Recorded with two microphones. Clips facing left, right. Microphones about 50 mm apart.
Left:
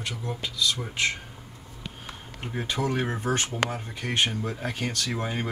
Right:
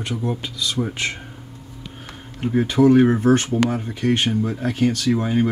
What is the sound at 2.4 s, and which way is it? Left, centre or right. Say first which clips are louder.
Speech: right 13 dB; centre.